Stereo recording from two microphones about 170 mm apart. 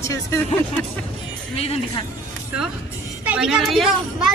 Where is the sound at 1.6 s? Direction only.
35° left (ahead or behind).